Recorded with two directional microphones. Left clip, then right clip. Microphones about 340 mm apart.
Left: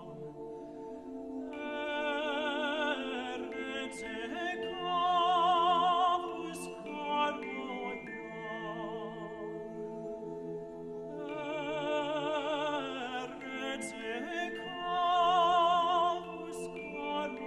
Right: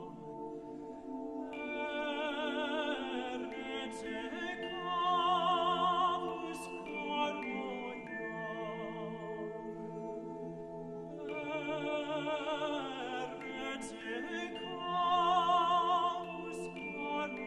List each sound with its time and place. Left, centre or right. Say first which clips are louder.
1.7 s music: left 4 dB; left
4.4 s music: left 4 dB; left
11.4 s opera: left 3 dB; left
13.7 s music: left 3 dB; left